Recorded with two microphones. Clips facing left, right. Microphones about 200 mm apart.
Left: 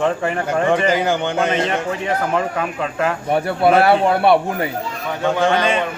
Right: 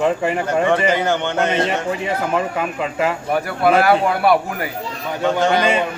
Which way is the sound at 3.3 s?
30° left (ahead or behind).